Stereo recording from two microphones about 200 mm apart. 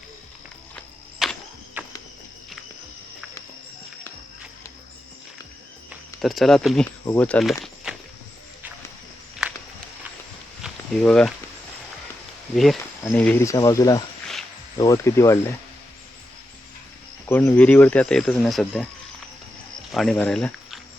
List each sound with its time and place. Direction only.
1.2 s a sound: centre (ahead or behind)
5.9 s speech: centre (ahead or behind)
9.4 s walk: 5° right (ahead or behind)
10.6 s a sound: 5° left (ahead or behind)
13.1 s speech: 10° left (ahead or behind)
17.2 s speech: 10° left (ahead or behind)
19.9 s speech: centre (ahead or behind)